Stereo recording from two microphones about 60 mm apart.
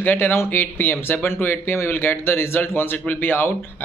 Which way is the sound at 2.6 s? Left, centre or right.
Left.